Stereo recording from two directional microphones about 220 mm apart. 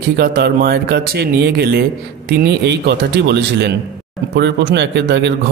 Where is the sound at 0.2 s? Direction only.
45° right (ahead or behind).